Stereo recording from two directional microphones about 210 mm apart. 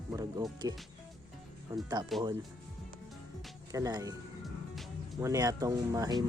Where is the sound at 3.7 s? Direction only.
15° right (ahead or behind).